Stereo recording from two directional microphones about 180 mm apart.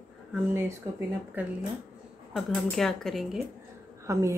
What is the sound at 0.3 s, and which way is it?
A woman's voice, 10° right (ahead or behind).